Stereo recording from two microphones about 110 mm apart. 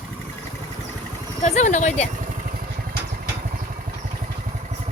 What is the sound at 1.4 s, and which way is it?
Speech, 90° left.